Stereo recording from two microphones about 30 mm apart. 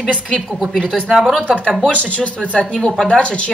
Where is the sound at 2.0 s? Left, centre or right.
Left.